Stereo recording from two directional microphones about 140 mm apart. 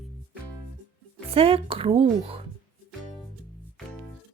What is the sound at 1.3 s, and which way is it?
Speech, 45° right (ahead or behind).